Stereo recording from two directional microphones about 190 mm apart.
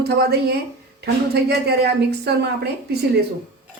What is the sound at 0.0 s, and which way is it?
A woman's voice, 55° right (ahead or behind).